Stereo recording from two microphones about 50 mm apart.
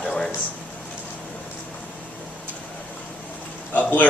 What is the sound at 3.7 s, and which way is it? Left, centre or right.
Speech, left.